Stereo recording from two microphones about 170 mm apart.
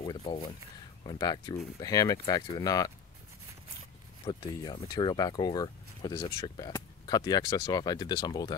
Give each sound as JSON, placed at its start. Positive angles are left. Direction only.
{"t": 0.0, "sound": "a sound", "side_deg": 30}
{"t": 1.0, "sound": "speech", "side_deg": 25}
{"t": 4.3, "sound": "speech", "side_deg": 25}